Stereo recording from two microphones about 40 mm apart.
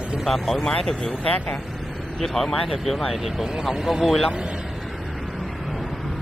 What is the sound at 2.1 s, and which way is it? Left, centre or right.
Speech, centre.